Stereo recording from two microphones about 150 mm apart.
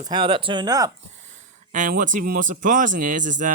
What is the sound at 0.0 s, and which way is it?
Speech, 30° right (ahead or behind).